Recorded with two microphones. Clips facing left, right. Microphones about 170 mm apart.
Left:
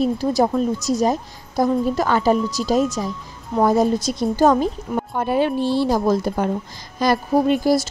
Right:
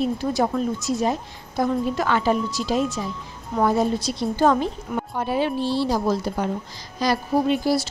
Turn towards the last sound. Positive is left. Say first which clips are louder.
# left 4 dB
turn(degrees=45)  # may be behind; listen again after turning